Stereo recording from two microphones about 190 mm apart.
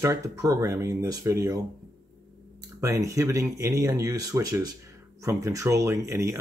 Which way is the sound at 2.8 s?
15° right (ahead or behind).